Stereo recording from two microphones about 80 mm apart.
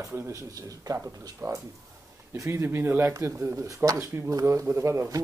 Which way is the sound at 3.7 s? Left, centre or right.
Right.